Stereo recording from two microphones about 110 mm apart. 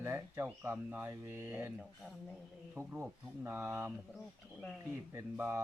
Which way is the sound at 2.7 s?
20° right (ahead or behind).